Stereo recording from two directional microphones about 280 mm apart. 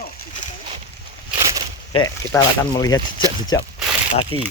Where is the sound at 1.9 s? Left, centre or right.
Centre.